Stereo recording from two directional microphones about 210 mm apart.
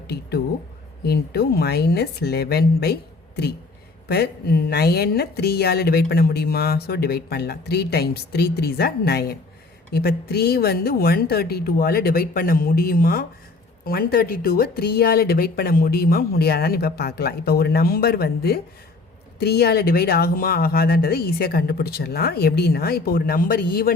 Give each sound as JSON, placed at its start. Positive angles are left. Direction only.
{"t": 0.1, "sound": "speech", "side_deg": 50}